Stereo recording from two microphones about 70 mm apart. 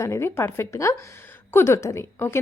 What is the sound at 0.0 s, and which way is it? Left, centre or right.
A woman's voice, left.